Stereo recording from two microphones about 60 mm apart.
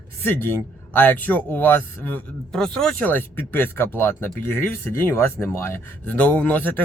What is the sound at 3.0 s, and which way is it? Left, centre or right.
Speech, left.